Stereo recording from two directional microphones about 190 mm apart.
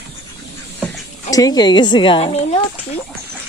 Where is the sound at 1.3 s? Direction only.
20° left (ahead or behind).